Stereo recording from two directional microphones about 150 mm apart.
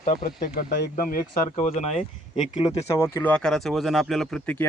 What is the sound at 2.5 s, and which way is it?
Speech, 25° left (ahead or behind).